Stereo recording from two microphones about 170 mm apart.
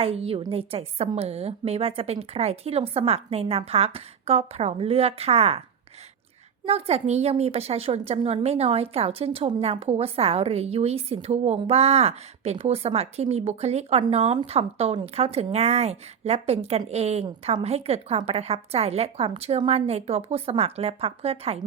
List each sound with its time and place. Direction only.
0.0 s a woman's voice: 35° right (ahead or behind)
6.7 s a woman's voice: 35° right (ahead or behind)